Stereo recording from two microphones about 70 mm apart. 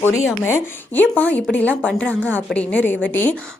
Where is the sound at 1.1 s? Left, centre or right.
Left.